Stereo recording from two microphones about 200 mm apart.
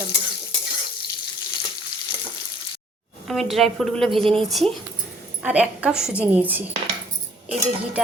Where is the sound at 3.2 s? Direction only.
Centre (ahead or behind).